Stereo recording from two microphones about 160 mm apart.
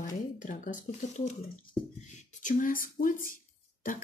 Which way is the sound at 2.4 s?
55° left (ahead or behind).